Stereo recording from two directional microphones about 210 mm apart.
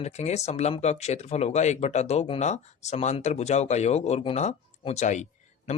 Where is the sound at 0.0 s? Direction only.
30° left (ahead or behind).